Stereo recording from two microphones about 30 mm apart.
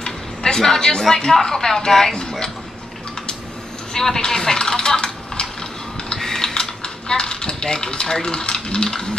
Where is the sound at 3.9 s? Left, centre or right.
Centre.